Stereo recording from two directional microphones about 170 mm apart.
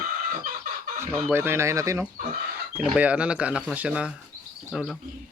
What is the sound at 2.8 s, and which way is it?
Speech, 5° right (ahead or behind).